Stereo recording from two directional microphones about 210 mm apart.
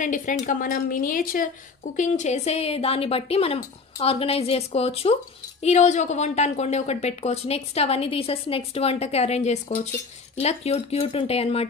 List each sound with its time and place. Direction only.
0.0 s a woman's voice: 35° left (ahead or behind)